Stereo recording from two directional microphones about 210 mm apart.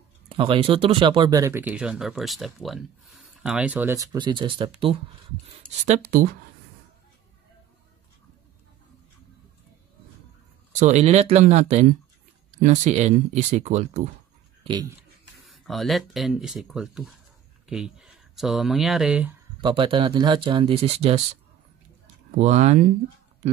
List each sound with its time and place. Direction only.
0.3 s speech: 25° right (ahead or behind)
10.8 s speech: 35° right (ahead or behind)
14.6 s speech: 20° right (ahead or behind)
15.4 s speech: centre (ahead or behind)
19.6 s speech: 25° right (ahead or behind)
22.4 s speech: 35° right (ahead or behind)